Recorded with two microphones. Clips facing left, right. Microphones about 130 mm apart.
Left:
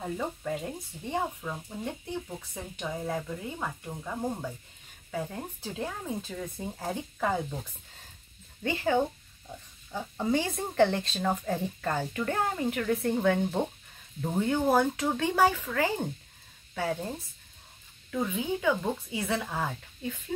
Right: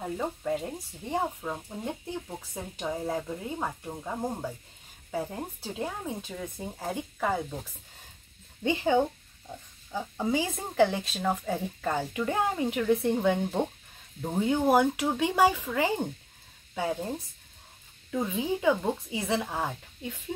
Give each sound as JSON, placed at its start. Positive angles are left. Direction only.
{"t": 0.0, "sound": "speech", "side_deg": -10}
{"t": 5.8, "sound": "speech", "side_deg": -15}
{"t": 8.6, "sound": "a woman's voice", "side_deg": -20}
{"t": 18.1, "sound": "a woman's voice", "side_deg": -25}